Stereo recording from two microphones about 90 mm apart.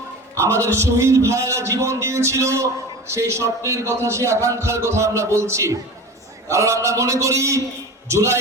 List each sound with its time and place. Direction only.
0.3 s a man's voice: 30° right (ahead or behind)